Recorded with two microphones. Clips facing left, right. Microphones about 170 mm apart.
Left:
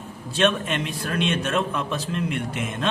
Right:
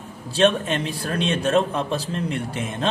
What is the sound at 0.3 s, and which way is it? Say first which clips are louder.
A man's voice: right 3 dB; 35° right (ahead or behind).